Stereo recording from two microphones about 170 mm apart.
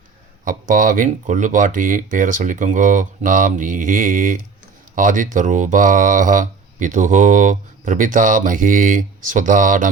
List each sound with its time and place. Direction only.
0.4 s speech: 50° right (ahead or behind)